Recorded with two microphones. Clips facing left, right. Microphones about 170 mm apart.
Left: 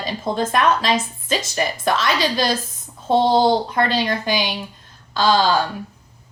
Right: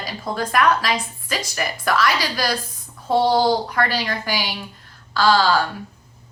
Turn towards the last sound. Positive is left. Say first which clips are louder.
# even
turn(degrees=20)  # may be behind; listen again after turning